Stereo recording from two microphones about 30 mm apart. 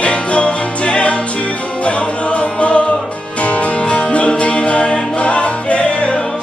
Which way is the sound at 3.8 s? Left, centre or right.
Left.